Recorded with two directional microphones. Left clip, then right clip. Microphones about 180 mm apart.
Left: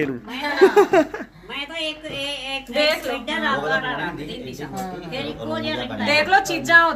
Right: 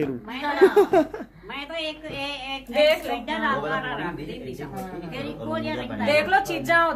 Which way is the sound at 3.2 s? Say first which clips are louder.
Left 2 dB; 5° left (ahead or behind).